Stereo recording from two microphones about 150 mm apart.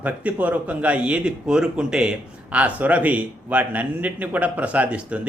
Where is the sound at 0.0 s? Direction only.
10° right (ahead or behind).